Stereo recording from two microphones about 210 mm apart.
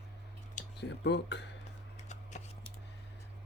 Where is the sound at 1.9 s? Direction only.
35° left (ahead or behind).